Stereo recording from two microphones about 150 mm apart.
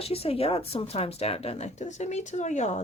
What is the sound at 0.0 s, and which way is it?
Speech, 40° left (ahead or behind).